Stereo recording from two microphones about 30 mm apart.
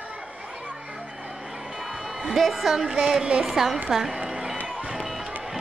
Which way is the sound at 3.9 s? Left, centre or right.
Centre.